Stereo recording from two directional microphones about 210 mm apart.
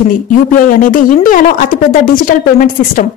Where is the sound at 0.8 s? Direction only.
40° left (ahead or behind).